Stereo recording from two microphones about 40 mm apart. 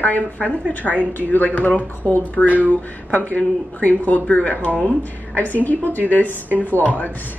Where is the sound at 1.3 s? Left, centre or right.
Left.